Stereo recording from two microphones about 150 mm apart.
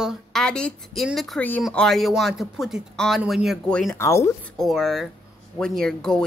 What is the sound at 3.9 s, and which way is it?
Speech, 15° left (ahead or behind).